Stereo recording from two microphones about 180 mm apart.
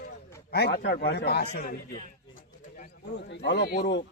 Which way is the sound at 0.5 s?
65° left (ahead or behind).